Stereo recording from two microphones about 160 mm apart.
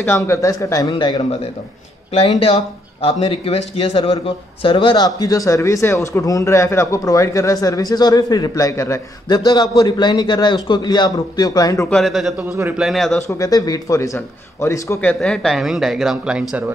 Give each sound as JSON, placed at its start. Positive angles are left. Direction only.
{"t": 0.0, "sound": "speech", "side_deg": 15}
{"t": 3.0, "sound": "a man's voice", "side_deg": 35}
{"t": 11.9, "sound": "a man's voice", "side_deg": 0}
{"t": 12.4, "sound": "a man's voice", "side_deg": -15}
{"t": 12.8, "sound": "a man's voice", "side_deg": 0}
{"t": 13.3, "sound": "a man's voice", "side_deg": 20}